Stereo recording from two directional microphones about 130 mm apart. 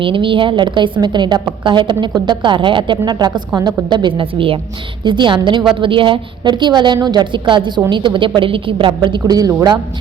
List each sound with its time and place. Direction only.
0.0 s a woman's voice: 40° right (ahead or behind)